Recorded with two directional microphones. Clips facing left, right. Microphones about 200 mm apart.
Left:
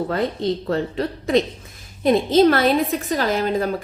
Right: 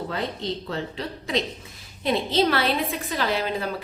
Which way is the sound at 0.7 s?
50° left (ahead or behind).